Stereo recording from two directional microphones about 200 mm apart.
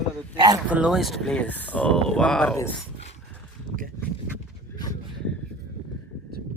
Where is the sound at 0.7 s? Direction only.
5° right (ahead or behind).